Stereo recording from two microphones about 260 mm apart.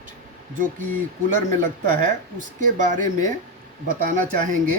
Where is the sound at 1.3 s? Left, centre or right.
Right.